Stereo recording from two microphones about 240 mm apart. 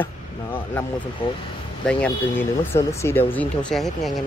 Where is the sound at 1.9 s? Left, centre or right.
Centre.